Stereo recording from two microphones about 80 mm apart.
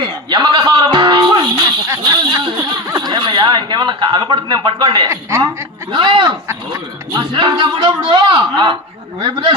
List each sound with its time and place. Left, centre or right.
0.0 s music: right
2.0 s a sound: right
2.6 s chuckle: right
5.9 s a man's voice: right